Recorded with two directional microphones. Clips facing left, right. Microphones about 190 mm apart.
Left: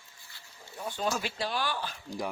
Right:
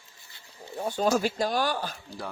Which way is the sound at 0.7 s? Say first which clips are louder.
Right 7 dB; 45° right (ahead or behind).